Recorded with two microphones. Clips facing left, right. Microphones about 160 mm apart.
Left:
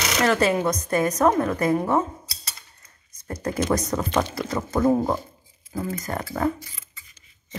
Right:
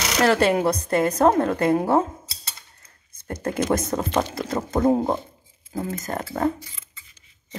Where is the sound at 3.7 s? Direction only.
30° right (ahead or behind).